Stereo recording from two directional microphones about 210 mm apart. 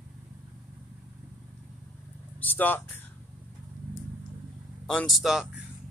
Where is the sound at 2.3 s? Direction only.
10° left (ahead or behind).